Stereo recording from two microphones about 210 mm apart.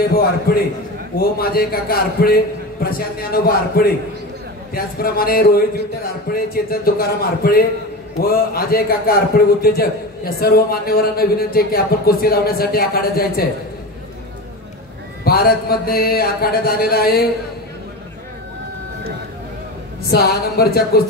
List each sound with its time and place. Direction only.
0.5 s a man's voice: 45° left (ahead or behind)
15.2 s a man's voice: 45° left (ahead or behind)
20.1 s a man's voice: 50° left (ahead or behind)